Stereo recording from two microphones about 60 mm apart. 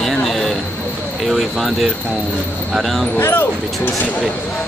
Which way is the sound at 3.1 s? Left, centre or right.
Left.